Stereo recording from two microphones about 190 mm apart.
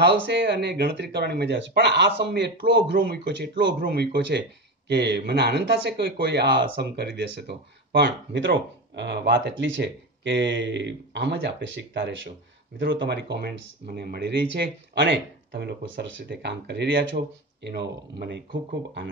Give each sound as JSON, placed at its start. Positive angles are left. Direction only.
{"t": 0.0, "sound": "speech", "side_deg": -65}
{"t": 3.8, "sound": "speech", "side_deg": -55}